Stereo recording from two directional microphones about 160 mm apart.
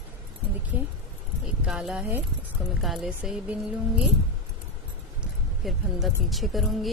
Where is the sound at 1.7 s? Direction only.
5° right (ahead or behind).